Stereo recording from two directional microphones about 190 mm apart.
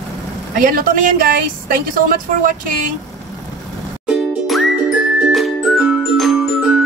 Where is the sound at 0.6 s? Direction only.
50° right (ahead or behind).